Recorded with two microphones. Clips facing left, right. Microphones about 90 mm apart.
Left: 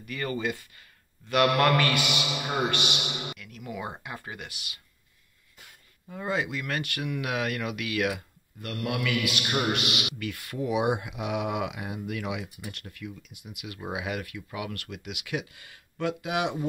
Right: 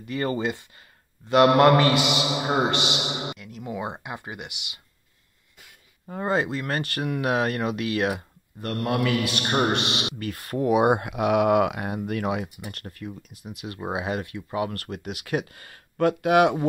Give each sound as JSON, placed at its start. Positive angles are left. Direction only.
{"t": 0.0, "sound": "a man's voice", "side_deg": -30}
{"t": 6.0, "sound": "speech", "side_deg": -45}
{"t": 10.6, "sound": "speech", "side_deg": -50}